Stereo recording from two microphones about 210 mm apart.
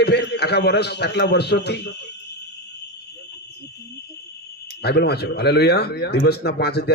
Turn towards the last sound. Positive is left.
turn(degrees=50)  # may be behind; listen again after turning